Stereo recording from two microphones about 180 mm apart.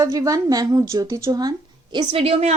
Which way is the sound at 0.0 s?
20° right (ahead or behind).